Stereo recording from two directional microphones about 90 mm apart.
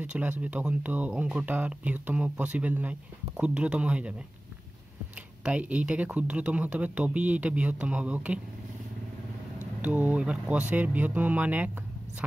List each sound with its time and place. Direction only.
0.0 s speech: 15° right (ahead or behind)
5.4 s speech: 15° right (ahead or behind)
9.8 s speech: 20° right (ahead or behind)